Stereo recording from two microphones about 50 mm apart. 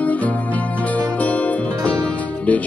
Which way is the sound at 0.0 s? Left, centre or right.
Left.